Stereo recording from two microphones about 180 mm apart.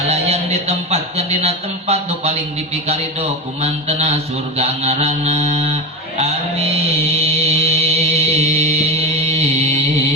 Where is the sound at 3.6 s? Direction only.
35° right (ahead or behind).